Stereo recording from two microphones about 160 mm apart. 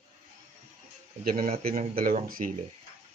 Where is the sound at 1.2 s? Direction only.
60° right (ahead or behind).